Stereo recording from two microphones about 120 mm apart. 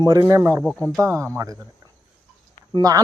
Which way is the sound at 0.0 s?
30° right (ahead or behind).